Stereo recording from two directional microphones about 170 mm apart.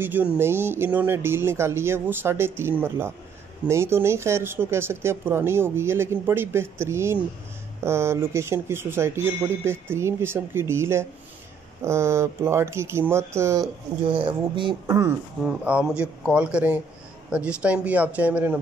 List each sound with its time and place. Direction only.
0.0 s speech: 10° right (ahead or behind)
14.0 s speech: 30° right (ahead or behind)
15.4 s speech: 5° right (ahead or behind)